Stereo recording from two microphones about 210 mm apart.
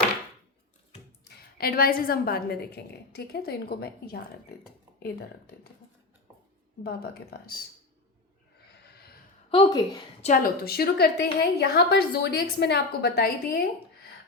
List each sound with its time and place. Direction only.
1.5 s a woman's voice: 45° left (ahead or behind)
6.8 s a woman's voice: 50° left (ahead or behind)
8.7 s snort: 50° left (ahead or behind)
9.5 s a woman's voice: 20° left (ahead or behind)
10.2 s a woman's voice: 35° left (ahead or behind)